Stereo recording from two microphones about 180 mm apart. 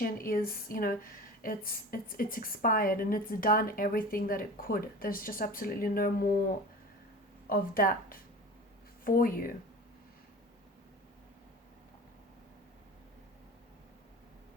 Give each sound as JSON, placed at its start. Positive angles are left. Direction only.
{"t": 0.0, "sound": "speech", "side_deg": 50}
{"t": 7.4, "sound": "speech", "side_deg": 55}